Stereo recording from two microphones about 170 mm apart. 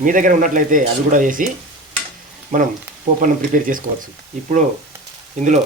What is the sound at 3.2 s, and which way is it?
Speech, 50° right (ahead or behind).